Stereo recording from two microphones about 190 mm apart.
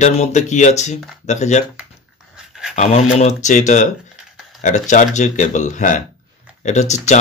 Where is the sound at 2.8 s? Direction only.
35° left (ahead or behind).